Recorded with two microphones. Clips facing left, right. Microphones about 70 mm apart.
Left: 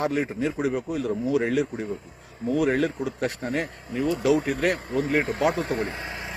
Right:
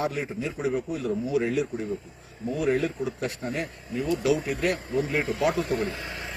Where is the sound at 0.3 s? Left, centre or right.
Left.